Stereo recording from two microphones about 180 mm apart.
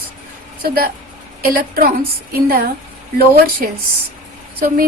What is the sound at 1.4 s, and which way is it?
Speech, 55° right (ahead or behind).